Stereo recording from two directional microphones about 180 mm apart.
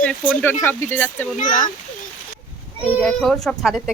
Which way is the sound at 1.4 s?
45° left (ahead or behind).